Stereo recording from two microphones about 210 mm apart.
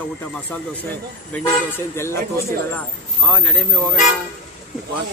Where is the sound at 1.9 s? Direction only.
10° left (ahead or behind).